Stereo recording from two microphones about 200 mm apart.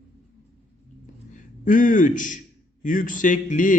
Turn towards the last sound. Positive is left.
turn(degrees=40)  # may be behind; listen again after turning